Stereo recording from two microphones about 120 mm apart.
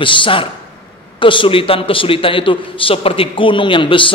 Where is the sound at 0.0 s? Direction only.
45° left (ahead or behind).